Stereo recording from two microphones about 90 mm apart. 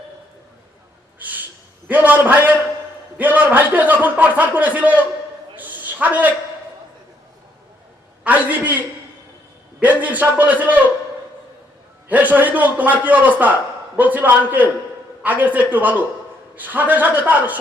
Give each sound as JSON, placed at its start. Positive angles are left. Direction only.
{"t": 1.2, "sound": "a sound", "side_deg": -20}
{"t": 1.9, "sound": "a man's voice", "side_deg": -20}
{"t": 5.5, "sound": "a sound", "side_deg": -20}
{"t": 8.2, "sound": "a man's voice", "side_deg": -20}
{"t": 9.8, "sound": "a man's voice", "side_deg": -20}
{"t": 12.0, "sound": "a man's voice", "side_deg": -20}